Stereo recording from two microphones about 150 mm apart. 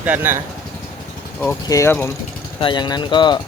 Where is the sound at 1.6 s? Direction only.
20° left (ahead or behind).